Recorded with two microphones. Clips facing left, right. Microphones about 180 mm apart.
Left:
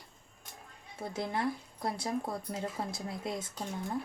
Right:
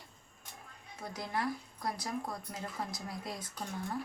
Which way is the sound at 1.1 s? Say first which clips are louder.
Left 3 dB; 25° left (ahead or behind).